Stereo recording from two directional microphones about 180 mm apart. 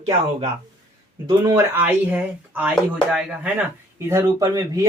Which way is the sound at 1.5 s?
15° right (ahead or behind).